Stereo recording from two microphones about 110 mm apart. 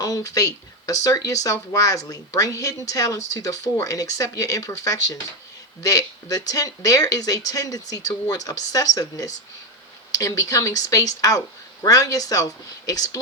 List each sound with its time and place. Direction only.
0.0 s speech: 30° left (ahead or behind)